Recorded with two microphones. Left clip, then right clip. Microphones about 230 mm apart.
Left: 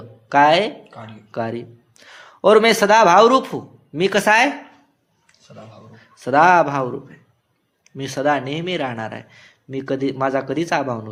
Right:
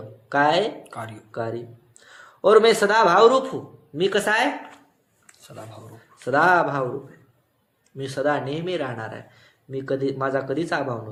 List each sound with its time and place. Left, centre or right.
0.3 s speech: left
0.9 s speech: right
1.3 s a man's voice: left
6.2 s speech: left
7.9 s speech: left